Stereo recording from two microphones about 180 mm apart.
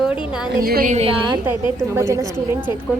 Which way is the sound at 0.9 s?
30° right (ahead or behind).